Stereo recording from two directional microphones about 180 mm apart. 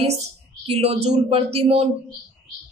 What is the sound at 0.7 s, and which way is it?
A man's voice, 35° right (ahead or behind).